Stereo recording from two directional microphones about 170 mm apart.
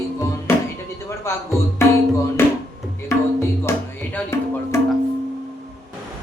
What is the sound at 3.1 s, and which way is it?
Tabla, 15° left (ahead or behind).